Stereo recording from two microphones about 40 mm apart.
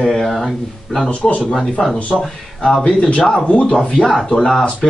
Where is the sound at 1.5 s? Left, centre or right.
Centre.